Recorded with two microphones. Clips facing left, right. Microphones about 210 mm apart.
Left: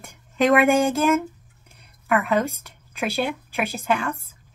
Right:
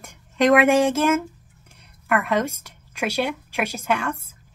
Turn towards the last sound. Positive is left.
turn(degrees=0)  # may be behind; listen again after turning